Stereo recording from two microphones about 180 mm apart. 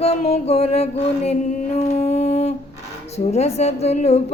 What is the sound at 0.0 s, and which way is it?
Mantra, 35° left (ahead or behind).